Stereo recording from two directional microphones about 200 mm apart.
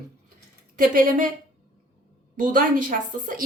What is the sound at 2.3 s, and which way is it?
Speech, 45° right (ahead or behind).